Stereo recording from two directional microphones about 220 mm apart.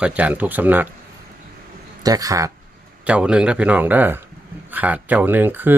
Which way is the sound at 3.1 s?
5° right (ahead or behind).